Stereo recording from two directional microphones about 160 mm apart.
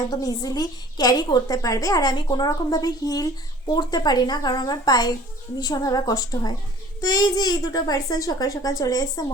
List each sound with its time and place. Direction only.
0.1 s a woman's voice: 25° left (ahead or behind)